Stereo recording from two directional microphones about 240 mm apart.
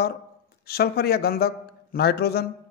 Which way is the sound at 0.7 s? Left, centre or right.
Left.